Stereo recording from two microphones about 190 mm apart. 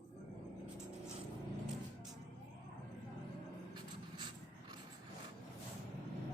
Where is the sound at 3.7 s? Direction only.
25° right (ahead or behind).